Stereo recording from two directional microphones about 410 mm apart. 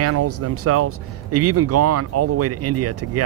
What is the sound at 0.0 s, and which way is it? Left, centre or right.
Speech, right.